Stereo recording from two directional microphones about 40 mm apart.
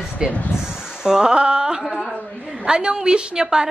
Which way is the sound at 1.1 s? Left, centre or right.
Centre.